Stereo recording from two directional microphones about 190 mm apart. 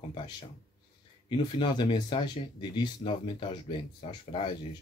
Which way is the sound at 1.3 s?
25° left (ahead or behind).